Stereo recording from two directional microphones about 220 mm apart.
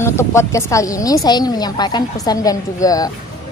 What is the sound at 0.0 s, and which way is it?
A woman's voice, 10° left (ahead or behind).